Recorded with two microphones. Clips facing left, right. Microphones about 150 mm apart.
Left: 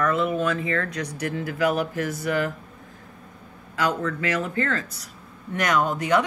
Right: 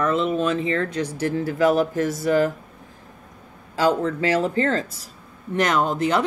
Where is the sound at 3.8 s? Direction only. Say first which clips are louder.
Right 5 dB; 30° right (ahead or behind).